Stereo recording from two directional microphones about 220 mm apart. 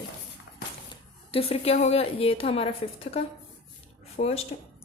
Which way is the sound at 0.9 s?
25° left (ahead or behind).